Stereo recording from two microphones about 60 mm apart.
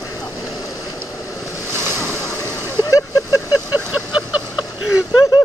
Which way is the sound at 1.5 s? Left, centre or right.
Left.